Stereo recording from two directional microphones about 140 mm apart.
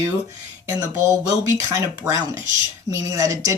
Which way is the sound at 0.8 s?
20° right (ahead or behind).